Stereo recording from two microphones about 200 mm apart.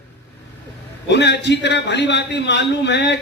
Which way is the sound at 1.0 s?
60° left (ahead or behind).